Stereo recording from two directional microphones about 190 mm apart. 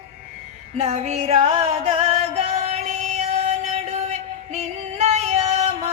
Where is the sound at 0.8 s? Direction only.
35° right (ahead or behind).